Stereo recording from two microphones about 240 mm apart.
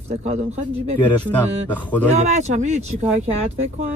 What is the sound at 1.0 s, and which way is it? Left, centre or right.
Speech, centre.